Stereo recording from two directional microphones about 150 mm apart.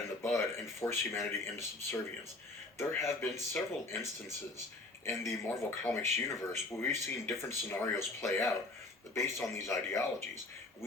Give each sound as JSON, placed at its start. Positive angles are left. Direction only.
{"t": 0.2, "sound": "speech", "side_deg": 15}